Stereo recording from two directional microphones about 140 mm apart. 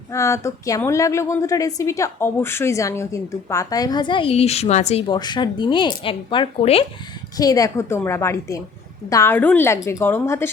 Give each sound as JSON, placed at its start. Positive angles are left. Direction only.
{"t": 0.1, "sound": "a woman's voice", "side_deg": 20}
{"t": 5.0, "sound": "speech", "side_deg": 30}
{"t": 7.3, "sound": "a woman's voice", "side_deg": 25}